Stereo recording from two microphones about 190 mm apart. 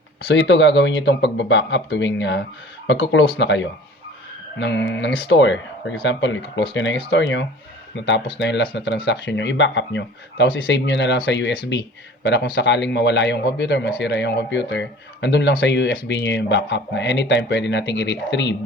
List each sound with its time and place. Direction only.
0.3 s speech: 70° left (ahead or behind)